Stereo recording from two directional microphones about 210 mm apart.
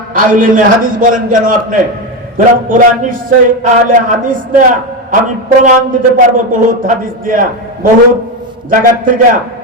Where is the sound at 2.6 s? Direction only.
40° right (ahead or behind).